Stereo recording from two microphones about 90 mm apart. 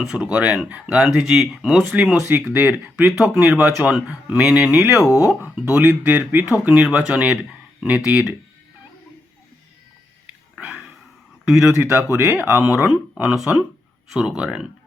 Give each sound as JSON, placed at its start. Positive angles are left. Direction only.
{"t": 0.0, "sound": "speech", "side_deg": -5}
{"t": 2.5, "sound": "speech", "side_deg": -15}
{"t": 3.2, "sound": "speech", "side_deg": -5}
{"t": 10.2, "sound": "a sound", "side_deg": -15}
{"t": 11.4, "sound": "speech", "side_deg": -5}
{"t": 11.8, "sound": "speech", "side_deg": -15}